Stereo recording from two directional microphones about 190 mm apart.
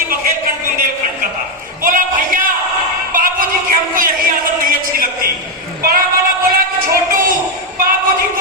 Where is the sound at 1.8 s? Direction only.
45° right (ahead or behind).